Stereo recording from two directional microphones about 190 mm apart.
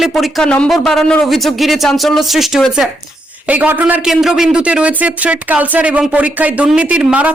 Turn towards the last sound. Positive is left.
turn(degrees=-5)  # may be behind; listen again after turning